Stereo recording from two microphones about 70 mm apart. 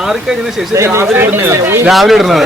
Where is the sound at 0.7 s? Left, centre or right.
Right.